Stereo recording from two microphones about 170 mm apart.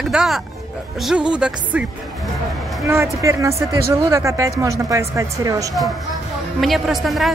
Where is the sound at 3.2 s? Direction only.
20° right (ahead or behind).